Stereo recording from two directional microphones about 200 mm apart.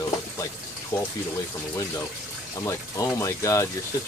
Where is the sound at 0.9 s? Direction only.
15° left (ahead or behind).